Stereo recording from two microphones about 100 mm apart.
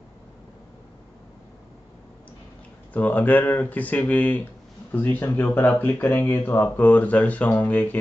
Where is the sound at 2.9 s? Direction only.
15° left (ahead or behind).